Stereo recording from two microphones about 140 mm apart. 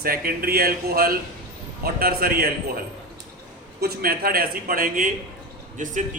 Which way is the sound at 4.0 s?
90° right.